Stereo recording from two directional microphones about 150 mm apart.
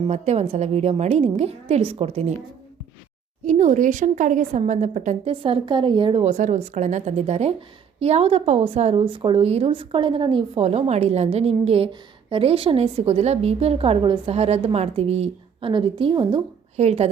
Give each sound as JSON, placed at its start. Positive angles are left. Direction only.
{"t": 0.0, "sound": "a woman's voice", "side_deg": -45}
{"t": 3.4, "sound": "a woman's voice", "side_deg": -55}
{"t": 5.3, "sound": "a woman's voice", "side_deg": -35}
{"t": 16.7, "sound": "a woman's voice", "side_deg": -45}